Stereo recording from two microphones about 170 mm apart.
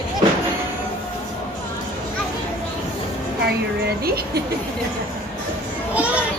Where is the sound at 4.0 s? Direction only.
65° right (ahead or behind).